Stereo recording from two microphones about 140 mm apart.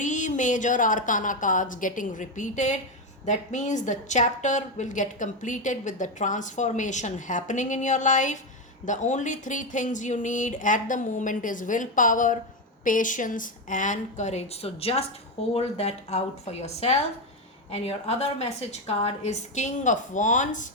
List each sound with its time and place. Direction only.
0.0 s a woman's voice: 60° left (ahead or behind)